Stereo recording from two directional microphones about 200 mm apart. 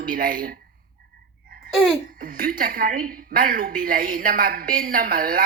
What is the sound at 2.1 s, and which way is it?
A woman's voice, 45° right (ahead or behind).